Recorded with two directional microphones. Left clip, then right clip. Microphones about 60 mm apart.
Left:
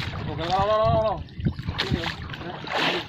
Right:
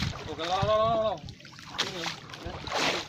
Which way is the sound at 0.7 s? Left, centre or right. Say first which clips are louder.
Left 2 dB; right.